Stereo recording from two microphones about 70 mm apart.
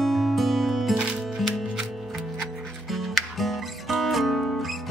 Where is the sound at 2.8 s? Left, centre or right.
Centre.